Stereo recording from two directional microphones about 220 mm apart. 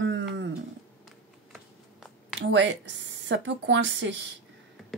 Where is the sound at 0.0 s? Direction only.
55° right (ahead or behind).